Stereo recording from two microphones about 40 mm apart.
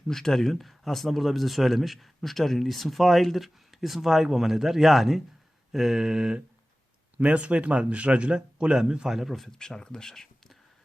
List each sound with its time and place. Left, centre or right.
0.1 s speech: centre
5.7 s mantra: centre
7.2 s a man's voice: right
9.0 s speech: centre
9.5 s speech: centre